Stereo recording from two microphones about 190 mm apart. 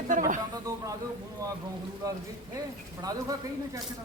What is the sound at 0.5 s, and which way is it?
Speech, 20° right (ahead or behind).